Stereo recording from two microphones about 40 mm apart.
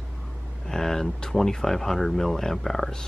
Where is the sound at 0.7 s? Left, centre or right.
Centre.